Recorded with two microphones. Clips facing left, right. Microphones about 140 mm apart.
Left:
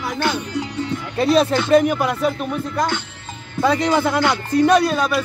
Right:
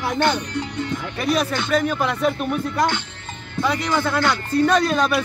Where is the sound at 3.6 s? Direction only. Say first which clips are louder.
Left 4 dB; 30° left (ahead or behind).